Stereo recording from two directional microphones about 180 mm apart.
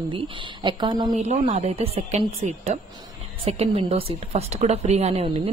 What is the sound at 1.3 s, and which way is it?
A woman's voice, 35° right (ahead or behind).